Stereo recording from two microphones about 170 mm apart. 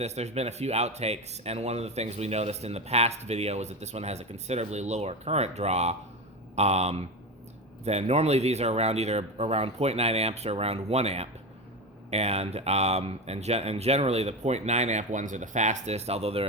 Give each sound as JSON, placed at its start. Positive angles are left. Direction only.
{"t": 0.0, "sound": "speech", "side_deg": -40}